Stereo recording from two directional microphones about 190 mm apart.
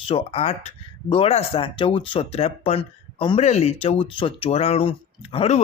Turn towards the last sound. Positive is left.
turn(degrees=30)  # may be behind; listen again after turning